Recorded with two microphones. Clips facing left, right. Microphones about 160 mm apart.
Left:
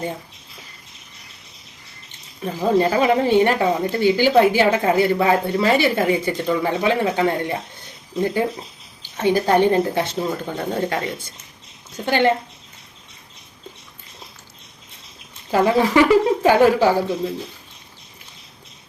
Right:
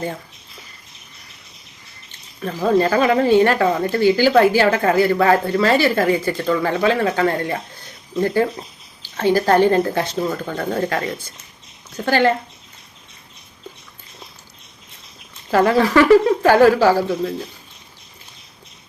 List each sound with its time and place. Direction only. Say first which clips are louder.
2.4 s speech: right 1 dB; 15° left (ahead or behind)
15.4 s speech: right 2 dB; 15° left (ahead or behind)